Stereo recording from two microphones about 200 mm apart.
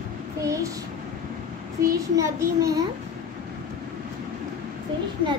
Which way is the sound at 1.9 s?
15° right (ahead or behind).